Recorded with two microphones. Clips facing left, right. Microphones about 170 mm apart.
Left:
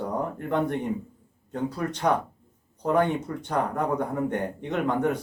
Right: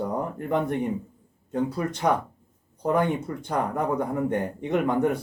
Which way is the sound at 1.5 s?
10° right (ahead or behind).